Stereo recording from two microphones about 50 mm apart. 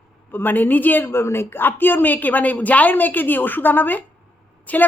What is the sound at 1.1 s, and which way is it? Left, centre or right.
A woman's voice, left.